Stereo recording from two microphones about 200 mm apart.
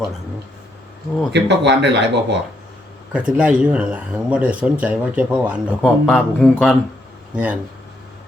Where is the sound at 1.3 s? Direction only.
60° right (ahead or behind).